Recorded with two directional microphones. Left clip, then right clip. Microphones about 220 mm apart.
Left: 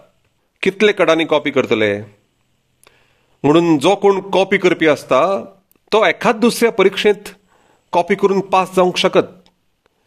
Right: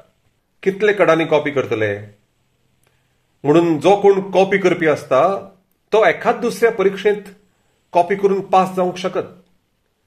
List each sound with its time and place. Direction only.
0.6 s a man's voice: 45° left (ahead or behind)
3.3 s a man's voice: 45° left (ahead or behind)